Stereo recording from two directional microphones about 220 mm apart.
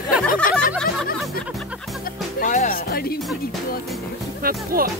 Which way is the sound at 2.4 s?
35° left (ahead or behind).